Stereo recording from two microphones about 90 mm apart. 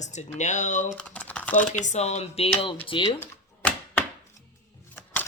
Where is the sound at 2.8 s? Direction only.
70° left (ahead or behind).